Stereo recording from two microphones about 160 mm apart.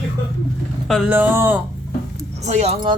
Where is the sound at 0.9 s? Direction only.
Centre (ahead or behind).